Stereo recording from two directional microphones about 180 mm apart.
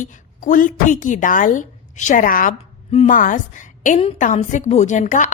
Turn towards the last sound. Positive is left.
turn(degrees=45)  # may be behind; listen again after turning